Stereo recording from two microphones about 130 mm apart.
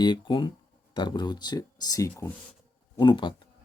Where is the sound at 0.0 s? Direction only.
35° left (ahead or behind).